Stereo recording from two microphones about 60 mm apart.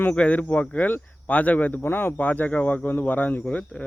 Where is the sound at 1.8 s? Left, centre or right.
Left.